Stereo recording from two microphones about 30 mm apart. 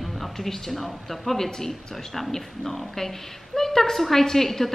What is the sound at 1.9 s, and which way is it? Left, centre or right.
A woman's voice, centre.